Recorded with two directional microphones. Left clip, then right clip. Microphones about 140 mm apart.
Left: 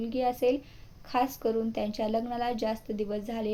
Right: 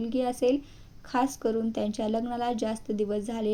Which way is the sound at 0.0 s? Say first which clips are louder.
Right 1 dB; 35° right (ahead or behind).